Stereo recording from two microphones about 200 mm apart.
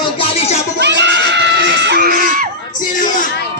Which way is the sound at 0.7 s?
60° right (ahead or behind).